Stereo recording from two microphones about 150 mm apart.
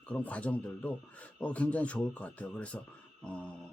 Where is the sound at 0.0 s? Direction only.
10° left (ahead or behind).